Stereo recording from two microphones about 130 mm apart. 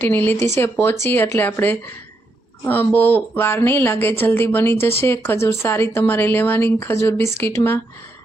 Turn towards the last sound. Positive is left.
turn(degrees=20)  # may be behind; listen again after turning